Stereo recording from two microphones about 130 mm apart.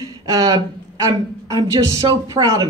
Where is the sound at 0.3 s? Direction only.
30° right (ahead or behind).